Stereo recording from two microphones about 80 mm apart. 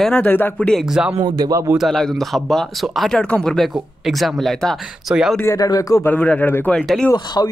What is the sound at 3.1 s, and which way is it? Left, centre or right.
Speech, centre.